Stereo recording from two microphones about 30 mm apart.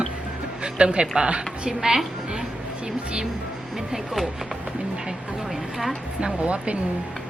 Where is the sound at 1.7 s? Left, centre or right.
Centre.